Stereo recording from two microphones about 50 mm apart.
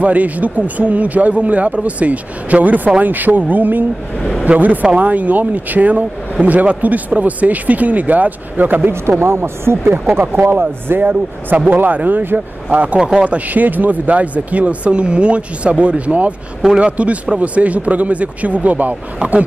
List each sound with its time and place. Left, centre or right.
0.0 s speech: right
4.2 s a sound: centre
4.5 s speech: right
9.2 s speech: right